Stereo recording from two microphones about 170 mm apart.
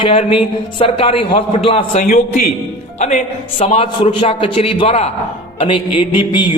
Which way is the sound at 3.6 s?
40° left (ahead or behind).